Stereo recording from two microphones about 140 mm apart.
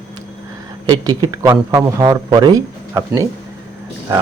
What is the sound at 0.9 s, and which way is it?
Speech, 30° right (ahead or behind).